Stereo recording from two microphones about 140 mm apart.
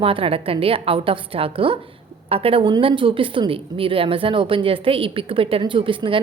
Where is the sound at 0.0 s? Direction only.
40° right (ahead or behind).